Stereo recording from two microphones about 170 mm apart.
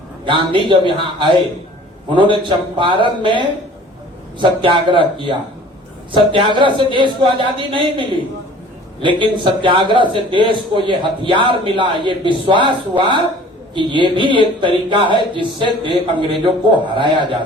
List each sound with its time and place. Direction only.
0.3 s a man's voice: 30° right (ahead or behind)
13.7 s a man's voice: 30° right (ahead or behind)